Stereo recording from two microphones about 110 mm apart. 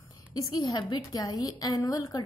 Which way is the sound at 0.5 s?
40° left (ahead or behind).